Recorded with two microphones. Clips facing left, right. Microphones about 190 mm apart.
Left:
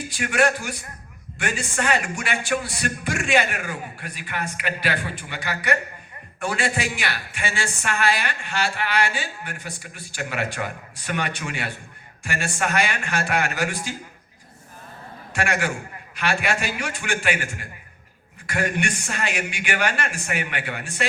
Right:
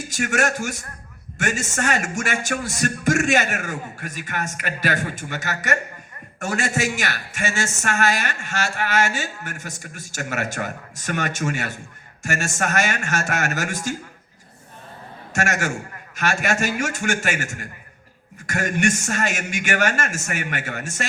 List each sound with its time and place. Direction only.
0.1 s a woman's voice: 45° right (ahead or behind)
15.3 s a man's voice: 45° right (ahead or behind)